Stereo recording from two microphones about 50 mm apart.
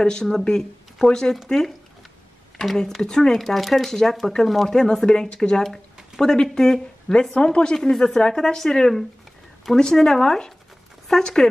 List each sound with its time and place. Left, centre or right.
0.0 s speech: centre